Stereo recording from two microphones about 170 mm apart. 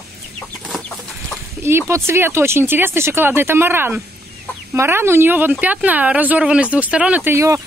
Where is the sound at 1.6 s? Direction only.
15° right (ahead or behind).